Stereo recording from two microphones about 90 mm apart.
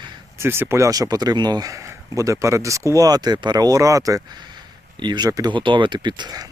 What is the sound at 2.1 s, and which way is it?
Speech, 35° right (ahead or behind).